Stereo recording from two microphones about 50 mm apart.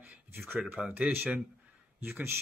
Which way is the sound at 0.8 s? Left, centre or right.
Centre.